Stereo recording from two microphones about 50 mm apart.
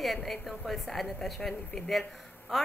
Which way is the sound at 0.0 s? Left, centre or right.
Centre.